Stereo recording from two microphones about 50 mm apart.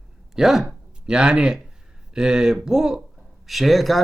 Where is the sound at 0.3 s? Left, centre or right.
Centre.